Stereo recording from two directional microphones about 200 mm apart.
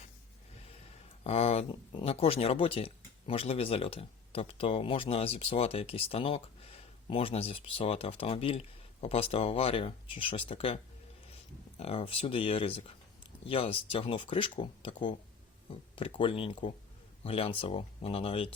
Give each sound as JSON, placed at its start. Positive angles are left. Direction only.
{"t": 1.2, "sound": "speech", "side_deg": 30}
{"t": 11.8, "sound": "speech", "side_deg": 30}